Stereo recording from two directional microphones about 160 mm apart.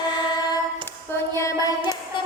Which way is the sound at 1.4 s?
20° left (ahead or behind).